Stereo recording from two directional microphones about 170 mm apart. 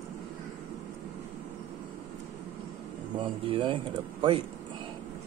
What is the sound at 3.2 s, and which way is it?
Speech, 30° right (ahead or behind).